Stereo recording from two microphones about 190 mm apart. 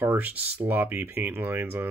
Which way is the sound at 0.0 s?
10° right (ahead or behind).